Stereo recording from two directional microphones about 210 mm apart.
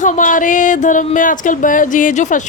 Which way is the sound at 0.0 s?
40° left (ahead or behind).